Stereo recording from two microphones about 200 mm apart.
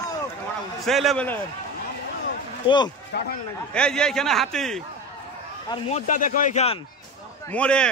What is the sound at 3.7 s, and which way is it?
A man's voice, 5° left (ahead or behind).